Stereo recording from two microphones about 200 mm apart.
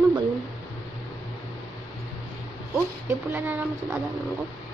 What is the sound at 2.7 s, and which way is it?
Speech, 10° right (ahead or behind).